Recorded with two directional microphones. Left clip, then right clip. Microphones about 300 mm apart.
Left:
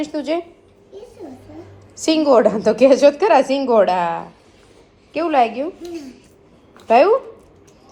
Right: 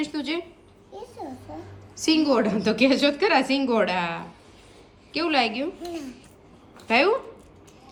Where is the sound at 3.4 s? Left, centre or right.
Centre.